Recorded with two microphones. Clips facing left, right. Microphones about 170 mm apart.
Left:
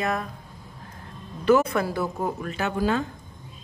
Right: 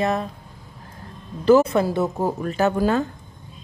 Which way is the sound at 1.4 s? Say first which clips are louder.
Right 5 dB; 25° right (ahead or behind).